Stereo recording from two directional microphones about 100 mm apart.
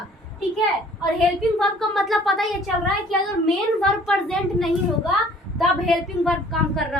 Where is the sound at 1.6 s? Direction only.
Centre (ahead or behind).